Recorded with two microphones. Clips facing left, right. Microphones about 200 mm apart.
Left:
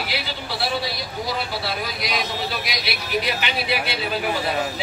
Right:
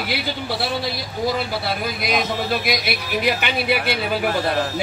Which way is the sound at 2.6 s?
55° right (ahead or behind).